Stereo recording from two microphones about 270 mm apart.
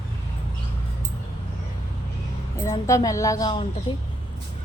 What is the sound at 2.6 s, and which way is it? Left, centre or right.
A woman's voice, centre.